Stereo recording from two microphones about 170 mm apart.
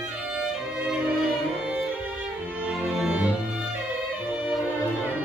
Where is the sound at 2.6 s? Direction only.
5° right (ahead or behind).